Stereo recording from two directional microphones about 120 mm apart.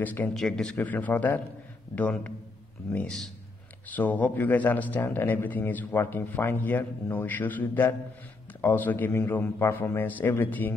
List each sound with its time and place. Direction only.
0.0 s speech: 15° left (ahead or behind)
0.3 s speech: 5° left (ahead or behind)